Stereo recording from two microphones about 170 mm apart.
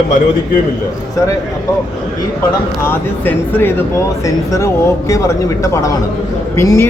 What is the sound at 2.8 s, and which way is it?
A man's voice, 10° left (ahead or behind).